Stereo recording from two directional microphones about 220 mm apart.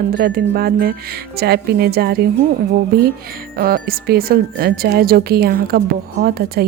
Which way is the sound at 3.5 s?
45° right (ahead or behind).